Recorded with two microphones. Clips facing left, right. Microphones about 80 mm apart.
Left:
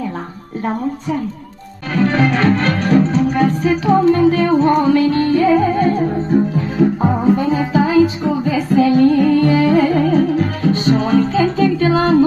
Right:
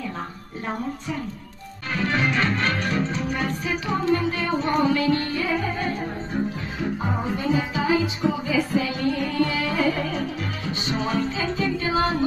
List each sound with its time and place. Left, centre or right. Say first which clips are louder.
2.0 s music: left 9 dB; left
6.8 s music: left 13 dB; left
7.7 s music: left 10 dB; left